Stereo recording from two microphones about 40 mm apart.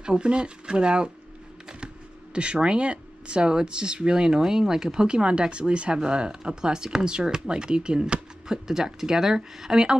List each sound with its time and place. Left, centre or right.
0.0 s speech: right
2.3 s speech: right